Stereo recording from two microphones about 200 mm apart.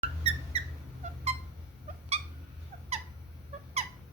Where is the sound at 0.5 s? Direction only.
30° right (ahead or behind).